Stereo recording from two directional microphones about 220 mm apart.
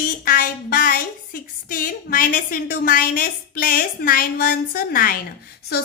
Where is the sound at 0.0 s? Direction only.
40° left (ahead or behind).